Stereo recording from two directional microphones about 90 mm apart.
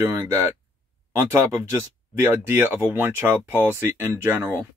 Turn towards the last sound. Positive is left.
turn(degrees=-25)  # may be behind; listen again after turning